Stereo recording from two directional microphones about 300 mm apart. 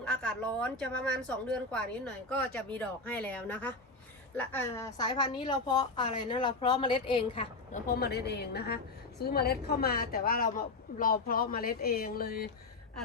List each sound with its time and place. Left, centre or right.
0.0 s a woman's voice: centre
7.9 s a woman's voice: left